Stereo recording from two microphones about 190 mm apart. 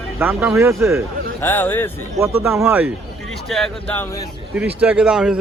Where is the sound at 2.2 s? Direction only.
15° right (ahead or behind).